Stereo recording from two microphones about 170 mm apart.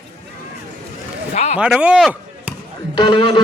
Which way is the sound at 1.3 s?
40° left (ahead or behind).